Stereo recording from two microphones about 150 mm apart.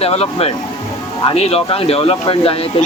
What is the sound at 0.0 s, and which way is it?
Speech, 40° left (ahead or behind).